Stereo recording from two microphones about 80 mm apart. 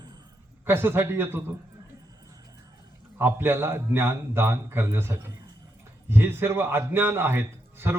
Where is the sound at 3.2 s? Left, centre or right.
Right.